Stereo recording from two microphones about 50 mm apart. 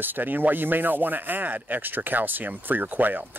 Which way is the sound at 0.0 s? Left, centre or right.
Right.